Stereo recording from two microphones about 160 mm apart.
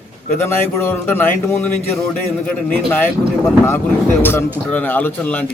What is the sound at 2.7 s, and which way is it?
A man's voice, 10° left (ahead or behind).